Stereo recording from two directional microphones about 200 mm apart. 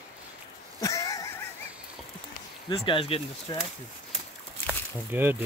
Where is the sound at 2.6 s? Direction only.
25° left (ahead or behind).